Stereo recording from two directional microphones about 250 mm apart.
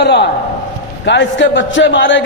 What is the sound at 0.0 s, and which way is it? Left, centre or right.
A man's voice, left.